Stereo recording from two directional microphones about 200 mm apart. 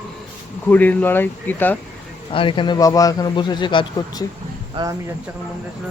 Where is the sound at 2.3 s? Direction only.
25° left (ahead or behind).